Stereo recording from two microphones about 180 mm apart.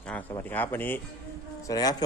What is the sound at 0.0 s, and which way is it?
Speech, 10° left (ahead or behind).